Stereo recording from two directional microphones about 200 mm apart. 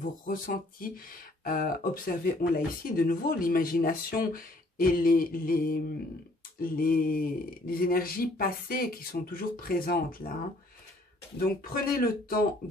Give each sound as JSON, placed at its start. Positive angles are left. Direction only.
{"t": 0.0, "sound": "speech", "side_deg": 45}
{"t": 11.3, "sound": "speech", "side_deg": 45}